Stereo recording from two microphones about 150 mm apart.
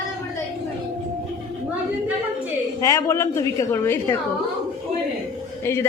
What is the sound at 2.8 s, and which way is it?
A woman's voice, 20° left (ahead or behind).